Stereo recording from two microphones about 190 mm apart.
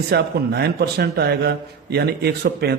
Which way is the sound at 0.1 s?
60° right (ahead or behind).